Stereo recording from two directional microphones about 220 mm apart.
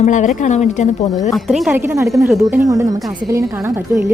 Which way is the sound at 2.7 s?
15° right (ahead or behind).